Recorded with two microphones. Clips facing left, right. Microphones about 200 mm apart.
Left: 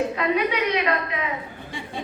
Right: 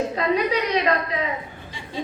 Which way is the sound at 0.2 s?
35° right (ahead or behind).